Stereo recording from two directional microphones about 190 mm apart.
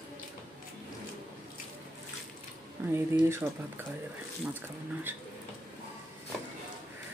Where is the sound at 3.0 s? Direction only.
15° right (ahead or behind).